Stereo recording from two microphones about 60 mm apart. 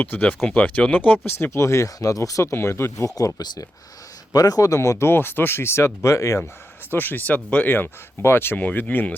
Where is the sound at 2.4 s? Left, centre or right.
Left.